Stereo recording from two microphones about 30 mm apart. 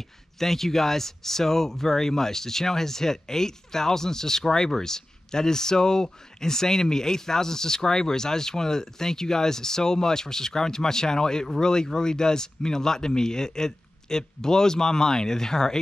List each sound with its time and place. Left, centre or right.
0.4 s speech: centre